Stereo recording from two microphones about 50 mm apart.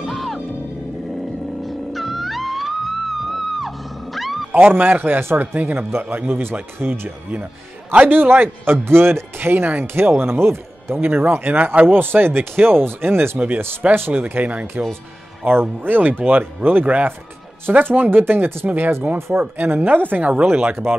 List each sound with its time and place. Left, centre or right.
0.0 s music: centre
1.9 s music: centre
4.5 s speech: right
8.1 s speech: right
11.5 s speech: right
14.3 s speech: right
15.4 s speech: right
19.5 s speech: right
20.6 s speech: right